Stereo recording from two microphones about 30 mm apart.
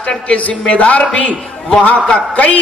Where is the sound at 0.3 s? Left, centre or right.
Left.